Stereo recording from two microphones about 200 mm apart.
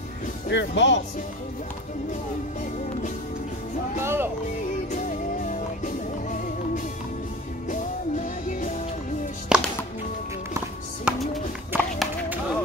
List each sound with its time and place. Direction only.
0.5 s speech: 60° left (ahead or behind)
4.0 s music: 10° right (ahead or behind)
4.9 s music: 40° left (ahead or behind)
7.7 s music: 40° left (ahead or behind)
9.5 s music: 5° right (ahead or behind)
11.1 s music: centre (ahead or behind)
11.7 s run: 10° right (ahead or behind)